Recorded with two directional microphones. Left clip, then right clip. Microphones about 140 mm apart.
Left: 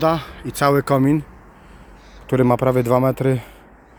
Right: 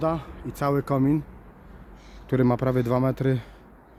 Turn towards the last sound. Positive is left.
turn(degrees=15)  # may be behind; listen again after turning